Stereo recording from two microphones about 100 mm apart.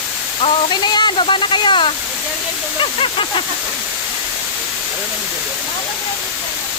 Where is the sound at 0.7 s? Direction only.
50° left (ahead or behind).